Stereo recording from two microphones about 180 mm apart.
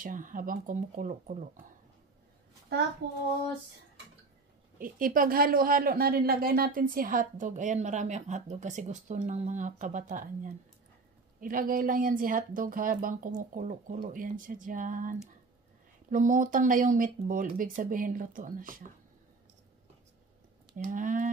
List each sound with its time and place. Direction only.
0.0 s speech: 50° right (ahead or behind)
4.7 s speech: 50° right (ahead or behind)
20.7 s speech: 45° right (ahead or behind)